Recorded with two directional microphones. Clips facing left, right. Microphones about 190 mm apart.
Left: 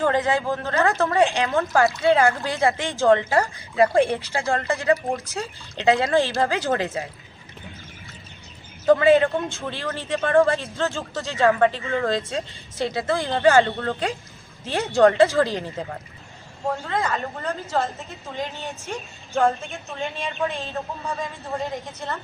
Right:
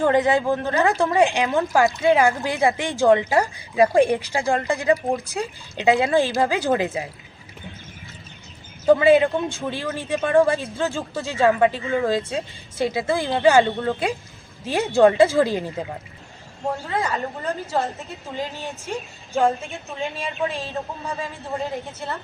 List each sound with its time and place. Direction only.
0.0 s speech: 15° right (ahead or behind)
8.9 s speech: 10° right (ahead or behind)
19.6 s a man's voice: centre (ahead or behind)